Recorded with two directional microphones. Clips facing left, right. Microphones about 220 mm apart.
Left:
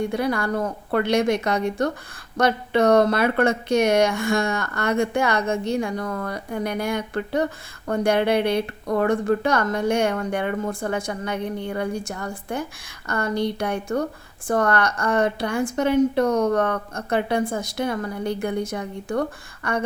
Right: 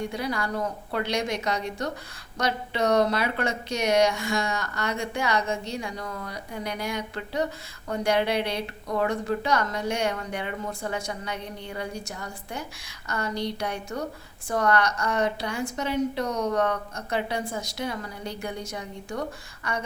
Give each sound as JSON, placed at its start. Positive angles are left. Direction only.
{"t": 0.1, "sound": "a woman's voice", "side_deg": 55}